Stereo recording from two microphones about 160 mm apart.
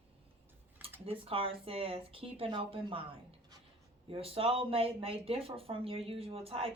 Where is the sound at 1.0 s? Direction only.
35° right (ahead or behind).